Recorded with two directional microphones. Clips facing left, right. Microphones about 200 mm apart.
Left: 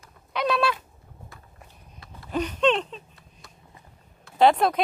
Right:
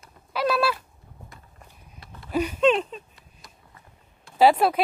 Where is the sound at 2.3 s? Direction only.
10° right (ahead or behind).